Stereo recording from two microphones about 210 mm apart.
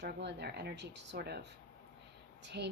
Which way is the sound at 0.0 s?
55° right (ahead or behind).